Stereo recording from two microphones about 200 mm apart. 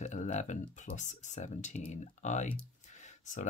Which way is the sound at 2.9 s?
35° left (ahead or behind).